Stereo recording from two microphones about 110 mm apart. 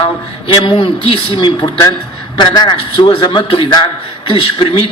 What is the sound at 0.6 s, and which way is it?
Speech, 50° left (ahead or behind).